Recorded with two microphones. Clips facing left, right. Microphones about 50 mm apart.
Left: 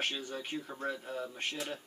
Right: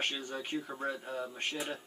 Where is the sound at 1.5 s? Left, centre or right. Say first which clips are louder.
Right 1 dB; centre.